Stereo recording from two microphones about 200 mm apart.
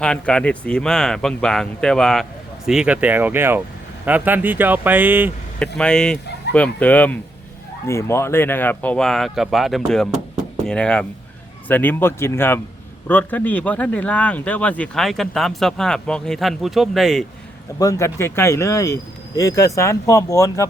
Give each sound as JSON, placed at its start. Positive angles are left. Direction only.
{"t": 0.0, "sound": "speech", "side_deg": 5}
{"t": 5.5, "sound": "speech", "side_deg": 5}
{"t": 17.7, "sound": "speech", "side_deg": 15}